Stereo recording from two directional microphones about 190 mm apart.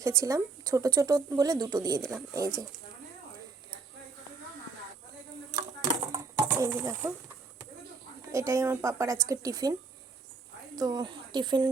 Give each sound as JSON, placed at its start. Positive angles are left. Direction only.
{"t": 0.0, "sound": "speech", "side_deg": -15}
{"t": 5.5, "sound": "a sound", "side_deg": -25}
{"t": 6.5, "sound": "speech", "side_deg": -15}
{"t": 8.3, "sound": "speech", "side_deg": -15}
{"t": 10.8, "sound": "speech", "side_deg": -20}